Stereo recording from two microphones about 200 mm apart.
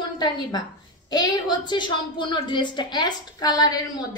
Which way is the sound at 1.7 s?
25° left (ahead or behind).